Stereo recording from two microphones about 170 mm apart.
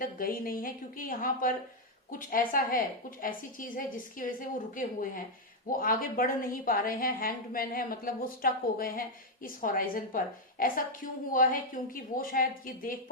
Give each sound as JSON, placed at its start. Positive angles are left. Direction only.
{"t": 0.0, "sound": "a woman's voice", "side_deg": 55}